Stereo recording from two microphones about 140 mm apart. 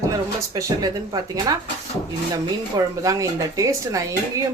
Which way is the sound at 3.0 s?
25° right (ahead or behind).